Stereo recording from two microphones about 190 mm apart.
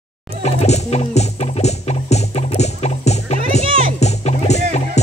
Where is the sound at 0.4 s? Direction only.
35° left (ahead or behind).